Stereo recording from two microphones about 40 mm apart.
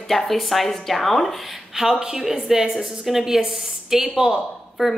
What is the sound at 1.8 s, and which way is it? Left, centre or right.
A woman's voice, centre.